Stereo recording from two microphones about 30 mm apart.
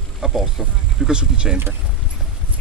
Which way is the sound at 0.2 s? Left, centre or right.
Right.